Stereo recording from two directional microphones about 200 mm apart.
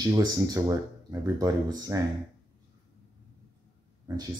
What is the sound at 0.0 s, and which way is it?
Speech, 20° right (ahead or behind).